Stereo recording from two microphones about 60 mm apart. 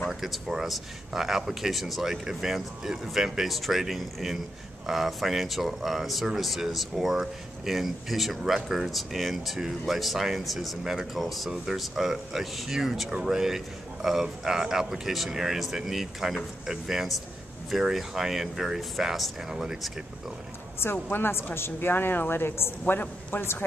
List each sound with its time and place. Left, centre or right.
0.0 s speech: centre
20.8 s speech: left